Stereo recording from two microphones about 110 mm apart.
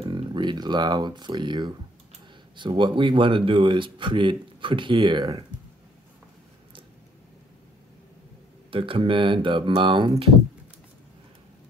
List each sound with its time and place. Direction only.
0.0 s speech: 45° right (ahead or behind)
8.6 s speech: 55° right (ahead or behind)